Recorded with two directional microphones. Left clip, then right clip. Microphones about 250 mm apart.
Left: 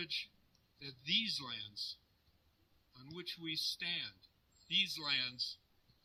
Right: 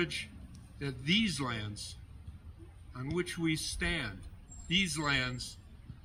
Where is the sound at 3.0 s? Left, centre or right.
Centre.